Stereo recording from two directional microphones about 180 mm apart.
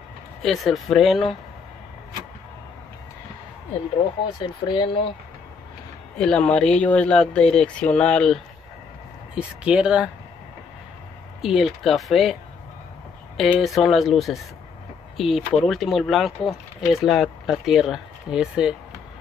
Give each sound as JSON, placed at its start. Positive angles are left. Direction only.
{"t": 0.4, "sound": "speech", "side_deg": 0}
{"t": 4.4, "sound": "speech", "side_deg": 25}
{"t": 6.1, "sound": "speech", "side_deg": 5}
{"t": 11.4, "sound": "speech", "side_deg": 0}
{"t": 13.4, "sound": "speech", "side_deg": 0}